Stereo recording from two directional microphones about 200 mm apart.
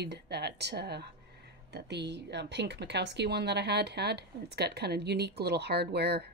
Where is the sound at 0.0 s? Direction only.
55° right (ahead or behind).